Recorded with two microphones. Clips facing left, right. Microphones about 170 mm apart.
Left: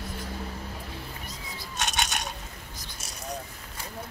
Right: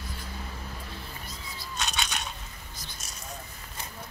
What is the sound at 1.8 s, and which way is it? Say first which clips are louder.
Scissors: left 3 dB; 50° left (ahead or behind).